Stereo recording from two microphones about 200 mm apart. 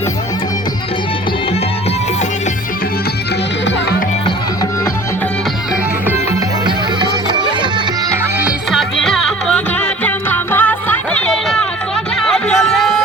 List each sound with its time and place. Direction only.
7.0 s music: 20° right (ahead or behind)
8.7 s music: centre (ahead or behind)